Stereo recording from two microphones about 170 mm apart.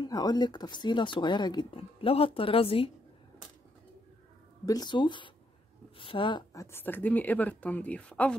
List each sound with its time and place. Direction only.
0.0 s speech: 25° left (ahead or behind)
4.6 s speech: 25° left (ahead or behind); by 8.4 s 5° left (ahead or behind)